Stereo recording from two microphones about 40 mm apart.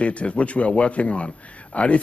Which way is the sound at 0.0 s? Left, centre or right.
Left.